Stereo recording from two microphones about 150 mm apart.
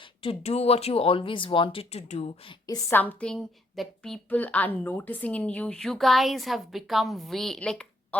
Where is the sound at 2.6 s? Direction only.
25° left (ahead or behind).